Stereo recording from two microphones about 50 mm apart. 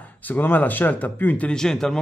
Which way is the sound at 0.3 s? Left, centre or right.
Left.